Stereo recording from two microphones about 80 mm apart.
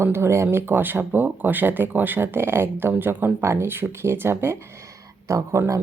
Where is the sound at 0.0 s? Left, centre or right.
Right.